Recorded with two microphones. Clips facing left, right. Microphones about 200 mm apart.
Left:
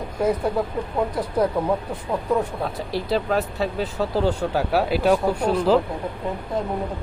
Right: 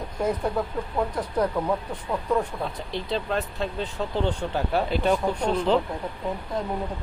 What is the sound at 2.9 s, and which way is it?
Speech, 5° left (ahead or behind).